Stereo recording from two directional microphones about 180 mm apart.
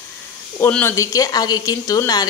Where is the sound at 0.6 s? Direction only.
10° left (ahead or behind).